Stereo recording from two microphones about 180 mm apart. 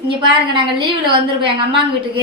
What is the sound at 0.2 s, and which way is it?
Speech, 25° right (ahead or behind).